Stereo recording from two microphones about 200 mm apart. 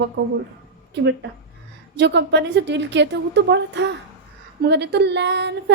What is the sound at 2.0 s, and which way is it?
Speech, 60° right (ahead or behind).